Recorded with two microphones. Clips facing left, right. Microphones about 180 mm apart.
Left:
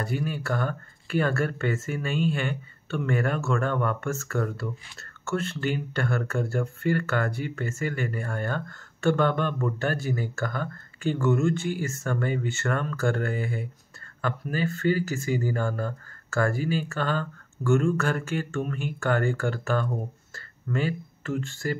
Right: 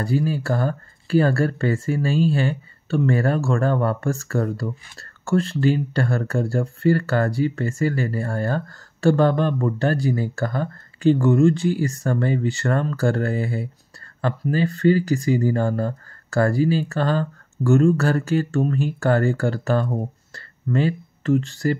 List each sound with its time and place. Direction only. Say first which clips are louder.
0.0 s speech: right 7 dB; 35° right (ahead or behind)